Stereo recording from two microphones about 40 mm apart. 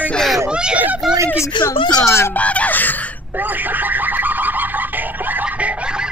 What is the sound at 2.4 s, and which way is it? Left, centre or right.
Speech, left.